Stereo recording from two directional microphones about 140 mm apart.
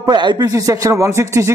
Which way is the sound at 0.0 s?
30° right (ahead or behind).